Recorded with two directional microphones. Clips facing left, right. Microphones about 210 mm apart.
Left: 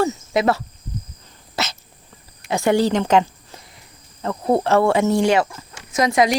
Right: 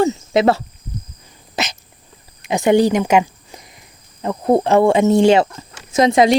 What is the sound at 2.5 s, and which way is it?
Speech, 20° right (ahead or behind).